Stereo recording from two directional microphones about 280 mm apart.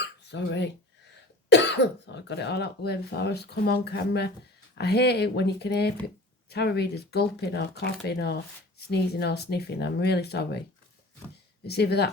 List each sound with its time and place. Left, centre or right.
0.0 s dog: left
1.5 s speech: left
11.6 s speech: left